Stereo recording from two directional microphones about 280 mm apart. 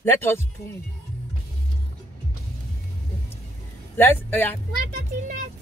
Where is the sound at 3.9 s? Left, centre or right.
Centre.